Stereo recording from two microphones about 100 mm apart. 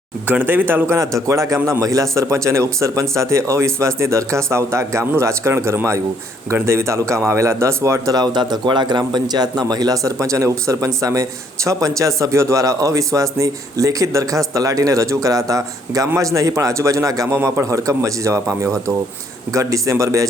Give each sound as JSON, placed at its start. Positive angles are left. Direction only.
{"t": 0.3, "sound": "speech", "side_deg": -20}